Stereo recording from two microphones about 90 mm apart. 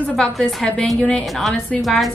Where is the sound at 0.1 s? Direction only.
10° left (ahead or behind).